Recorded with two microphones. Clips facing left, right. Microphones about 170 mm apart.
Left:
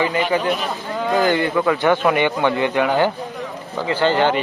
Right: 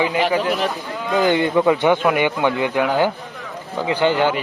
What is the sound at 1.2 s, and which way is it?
A man's voice, 20° right (ahead or behind).